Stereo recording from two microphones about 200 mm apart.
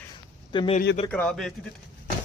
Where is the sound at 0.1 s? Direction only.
25° left (ahead or behind).